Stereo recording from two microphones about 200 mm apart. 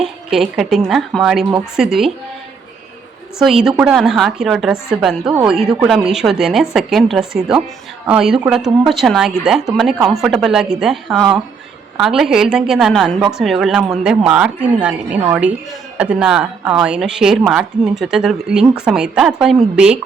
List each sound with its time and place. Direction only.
0.0 s speech: centre (ahead or behind)
3.3 s speech: centre (ahead or behind)